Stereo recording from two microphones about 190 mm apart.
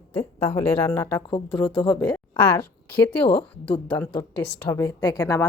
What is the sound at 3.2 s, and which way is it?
A woman's voice, 30° left (ahead or behind).